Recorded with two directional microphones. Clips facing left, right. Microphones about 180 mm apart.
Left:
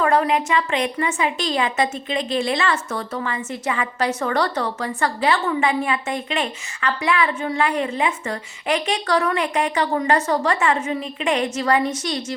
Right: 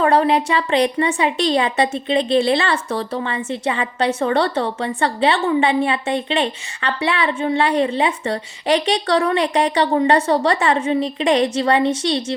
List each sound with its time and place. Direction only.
0.0 s a woman's voice: 30° right (ahead or behind)